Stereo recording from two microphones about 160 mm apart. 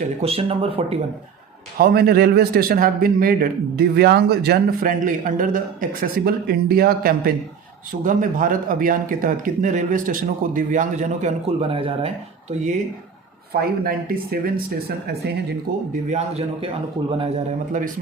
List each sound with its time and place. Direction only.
0.2 s speech: 40° right (ahead or behind)
1.8 s a man's voice: 75° right (ahead or behind)
8.0 s a man's voice: 55° right (ahead or behind)
13.5 s a man's voice: 70° right (ahead or behind); by 15.5 s 85° right
15.9 s a man's voice: 45° right (ahead or behind)
17.7 s speech: 55° right (ahead or behind)